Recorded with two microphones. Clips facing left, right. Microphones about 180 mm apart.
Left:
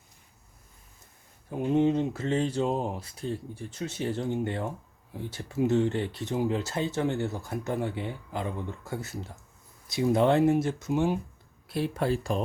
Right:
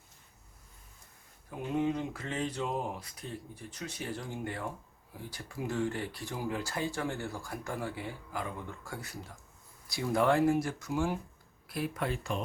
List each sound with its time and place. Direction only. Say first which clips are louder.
1.5 s speech: left 7 dB; 25° left (ahead or behind)